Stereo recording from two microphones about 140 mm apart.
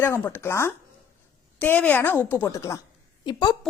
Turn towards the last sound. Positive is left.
turn(degrees=30)  # may be behind; listen again after turning